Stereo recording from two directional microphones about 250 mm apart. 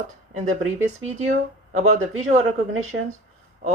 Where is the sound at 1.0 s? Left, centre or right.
Right.